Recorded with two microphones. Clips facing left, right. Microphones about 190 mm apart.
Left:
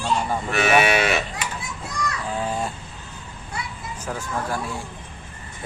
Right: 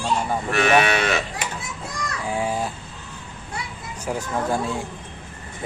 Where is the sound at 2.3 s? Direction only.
10° right (ahead or behind).